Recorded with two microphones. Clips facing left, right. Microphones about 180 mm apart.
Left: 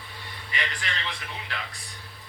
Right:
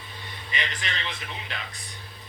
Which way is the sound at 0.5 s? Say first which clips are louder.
Even; 20° right (ahead or behind).